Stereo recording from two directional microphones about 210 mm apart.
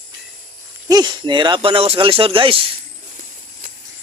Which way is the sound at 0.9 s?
20° right (ahead or behind).